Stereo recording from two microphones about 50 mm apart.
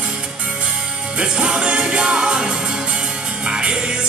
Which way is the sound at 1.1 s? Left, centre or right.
Right.